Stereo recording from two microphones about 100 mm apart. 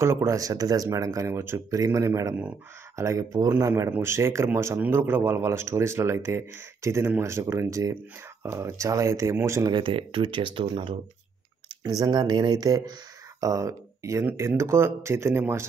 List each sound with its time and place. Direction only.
0.0 s speech: 30° right (ahead or behind)
9.7 s speech: 60° right (ahead or behind)
11.8 s speech: 40° right (ahead or behind); by 15.6 s 25° right (ahead or behind)